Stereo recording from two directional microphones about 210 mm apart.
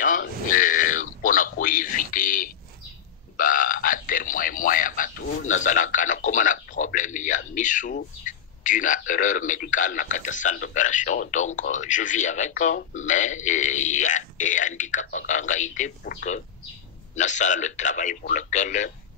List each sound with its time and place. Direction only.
0.5 s a sound: 40° left (ahead or behind)
11.7 s speech: 35° left (ahead or behind)
17.1 s speech: 35° left (ahead or behind)